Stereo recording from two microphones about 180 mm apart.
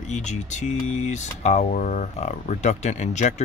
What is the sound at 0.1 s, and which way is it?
Speech, 40° left (ahead or behind).